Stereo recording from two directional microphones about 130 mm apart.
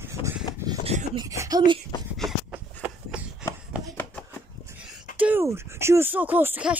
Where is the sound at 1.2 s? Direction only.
25° right (ahead or behind).